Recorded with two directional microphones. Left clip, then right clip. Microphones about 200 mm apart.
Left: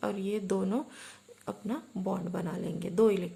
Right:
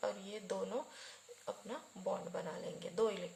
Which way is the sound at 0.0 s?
30° left (ahead or behind).